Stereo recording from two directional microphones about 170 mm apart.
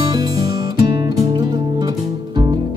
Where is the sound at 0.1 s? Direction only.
20° right (ahead or behind).